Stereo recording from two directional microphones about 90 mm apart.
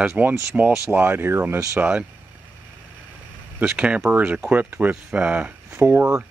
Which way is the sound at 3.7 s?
15° right (ahead or behind).